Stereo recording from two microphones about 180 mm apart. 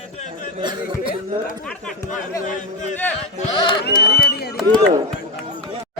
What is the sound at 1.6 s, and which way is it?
Speech, 5° left (ahead or behind).